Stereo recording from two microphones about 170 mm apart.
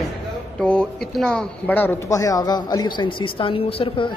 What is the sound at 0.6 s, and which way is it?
Speech, 5° left (ahead or behind).